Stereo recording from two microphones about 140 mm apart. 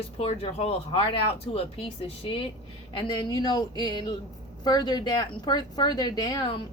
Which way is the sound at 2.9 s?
30° left (ahead or behind).